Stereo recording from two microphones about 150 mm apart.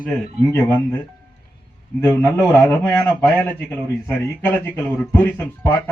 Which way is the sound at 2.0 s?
15° left (ahead or behind).